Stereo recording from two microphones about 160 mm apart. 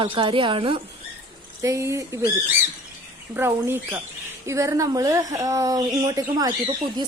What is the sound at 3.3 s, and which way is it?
Speech, 15° right (ahead or behind).